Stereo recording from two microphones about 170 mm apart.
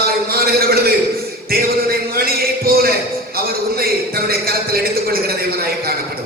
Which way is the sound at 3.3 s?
60° right (ahead or behind).